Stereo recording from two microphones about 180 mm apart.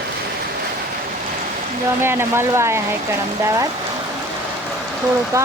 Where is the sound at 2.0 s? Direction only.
15° right (ahead or behind).